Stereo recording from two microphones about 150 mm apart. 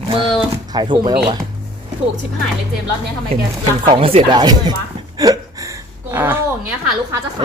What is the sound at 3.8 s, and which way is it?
Speech, 35° right (ahead or behind).